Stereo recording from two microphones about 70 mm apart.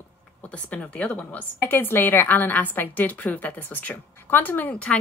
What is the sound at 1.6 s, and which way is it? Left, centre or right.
Speech, left.